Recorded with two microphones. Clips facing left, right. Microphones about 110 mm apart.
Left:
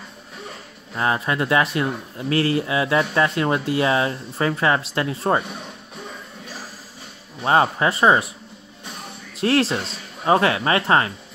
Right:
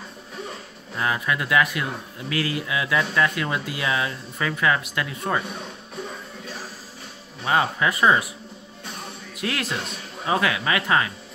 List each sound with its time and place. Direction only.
0.9 s speech: 30° left (ahead or behind)
7.4 s speech: 35° left (ahead or behind)
9.3 s speech: 30° left (ahead or behind)